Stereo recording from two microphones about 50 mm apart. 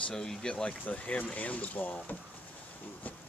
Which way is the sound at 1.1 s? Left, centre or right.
Left.